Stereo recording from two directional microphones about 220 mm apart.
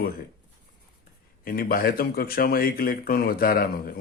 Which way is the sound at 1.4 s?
40° left (ahead or behind).